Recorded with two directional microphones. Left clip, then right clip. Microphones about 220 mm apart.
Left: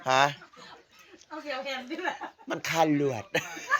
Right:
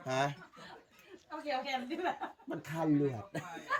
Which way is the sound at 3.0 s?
30° left (ahead or behind).